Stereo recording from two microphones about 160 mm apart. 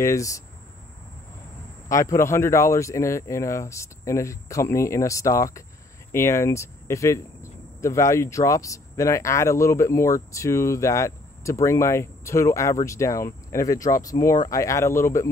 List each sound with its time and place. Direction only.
0.0 s speech: 20° left (ahead or behind)
1.9 s speech: 20° left (ahead or behind)